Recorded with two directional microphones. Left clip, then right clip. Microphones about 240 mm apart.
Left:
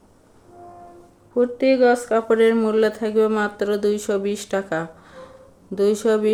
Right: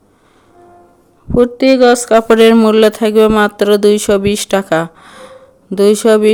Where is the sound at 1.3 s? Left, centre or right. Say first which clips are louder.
Right 8 dB; right.